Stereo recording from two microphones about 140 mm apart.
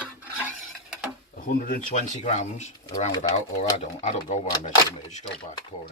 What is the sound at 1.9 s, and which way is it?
Speech, 60° left (ahead or behind).